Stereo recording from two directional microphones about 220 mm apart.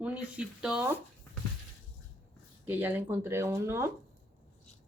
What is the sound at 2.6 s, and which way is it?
Speech, 10° right (ahead or behind).